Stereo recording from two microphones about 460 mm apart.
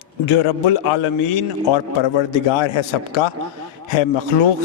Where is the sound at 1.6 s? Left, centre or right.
Left.